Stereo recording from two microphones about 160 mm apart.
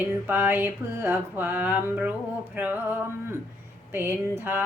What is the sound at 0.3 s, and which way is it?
Speech, 10° right (ahead or behind).